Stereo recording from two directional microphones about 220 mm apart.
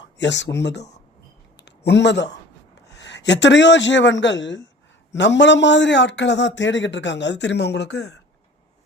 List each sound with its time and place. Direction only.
0.0 s speech: 55° left (ahead or behind)
1.5 s a sound: 50° left (ahead or behind)
2.9 s a man's voice: 55° left (ahead or behind)